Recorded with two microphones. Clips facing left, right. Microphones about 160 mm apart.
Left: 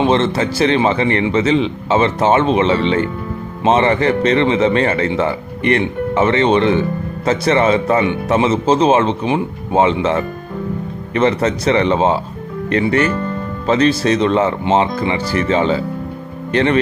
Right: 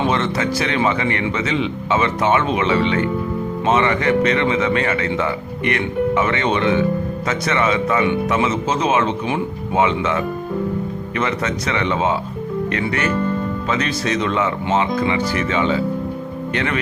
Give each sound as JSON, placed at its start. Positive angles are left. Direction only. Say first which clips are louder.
{"t": 0.0, "sound": "speech", "louder": "left 5 dB", "side_deg": 30}